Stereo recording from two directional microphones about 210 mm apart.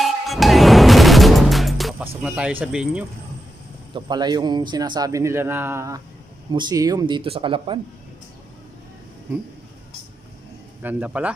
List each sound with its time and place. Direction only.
0.0 s music: centre (ahead or behind)
2.2 s speech: 5° right (ahead or behind)
3.9 s a man's voice: 20° right (ahead or behind)
10.8 s a man's voice: 10° right (ahead or behind)